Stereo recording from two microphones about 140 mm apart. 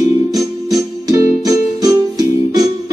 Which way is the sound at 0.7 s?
25° right (ahead or behind).